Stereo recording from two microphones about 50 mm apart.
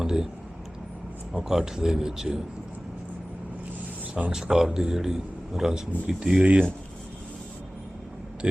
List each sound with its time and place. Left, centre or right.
0.0 s a sound: centre
1.4 s speech: centre
4.3 s speech: centre
6.4 s speech: right